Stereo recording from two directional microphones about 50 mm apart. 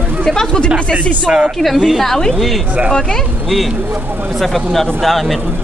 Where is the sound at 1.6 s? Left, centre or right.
Centre.